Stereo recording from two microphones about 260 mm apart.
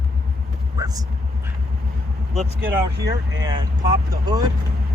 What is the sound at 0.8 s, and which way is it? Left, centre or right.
Speech, centre.